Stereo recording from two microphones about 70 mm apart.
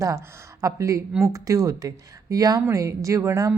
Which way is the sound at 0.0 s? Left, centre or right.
Right.